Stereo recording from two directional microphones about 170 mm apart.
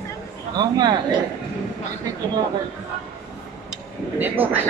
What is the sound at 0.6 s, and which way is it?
Speech, 25° right (ahead or behind).